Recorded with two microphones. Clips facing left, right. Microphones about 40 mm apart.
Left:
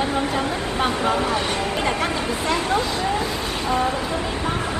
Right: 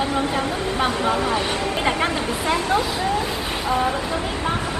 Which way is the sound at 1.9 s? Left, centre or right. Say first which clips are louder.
Right 1 dB; right.